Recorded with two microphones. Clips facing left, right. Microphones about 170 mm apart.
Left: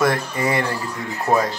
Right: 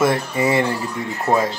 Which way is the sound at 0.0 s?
25° right (ahead or behind).